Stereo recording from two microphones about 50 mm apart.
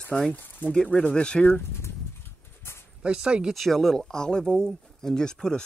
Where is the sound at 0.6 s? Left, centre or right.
Left.